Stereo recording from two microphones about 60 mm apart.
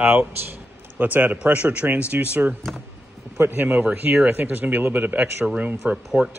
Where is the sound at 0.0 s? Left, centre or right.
Centre.